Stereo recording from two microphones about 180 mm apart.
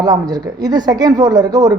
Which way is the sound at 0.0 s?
20° right (ahead or behind).